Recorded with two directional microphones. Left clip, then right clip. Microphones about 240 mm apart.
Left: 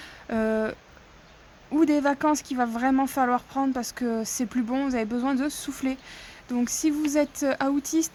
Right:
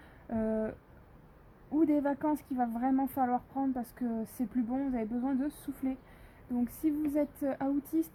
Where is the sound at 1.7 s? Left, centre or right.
Left.